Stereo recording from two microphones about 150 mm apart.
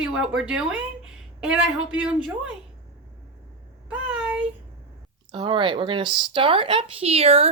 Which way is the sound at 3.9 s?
5° right (ahead or behind).